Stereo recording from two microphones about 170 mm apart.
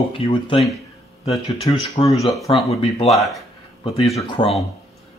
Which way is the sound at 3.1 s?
Centre (ahead or behind).